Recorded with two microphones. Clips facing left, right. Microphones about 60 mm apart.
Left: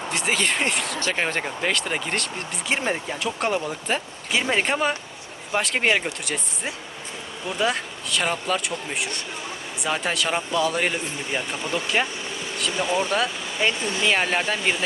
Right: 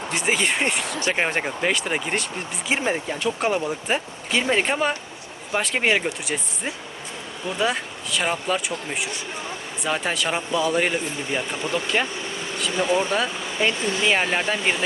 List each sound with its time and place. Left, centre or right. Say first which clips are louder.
0.1 s speech: right 1 dB; centre
0.9 s speech: right 2 dB; centre